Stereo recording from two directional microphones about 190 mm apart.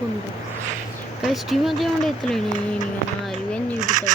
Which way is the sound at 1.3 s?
Centre (ahead or behind).